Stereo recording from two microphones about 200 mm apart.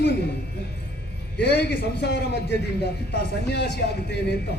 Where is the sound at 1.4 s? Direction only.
55° left (ahead or behind).